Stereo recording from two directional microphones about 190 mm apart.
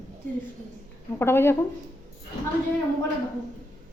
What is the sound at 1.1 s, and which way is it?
Speech, 10° left (ahead or behind).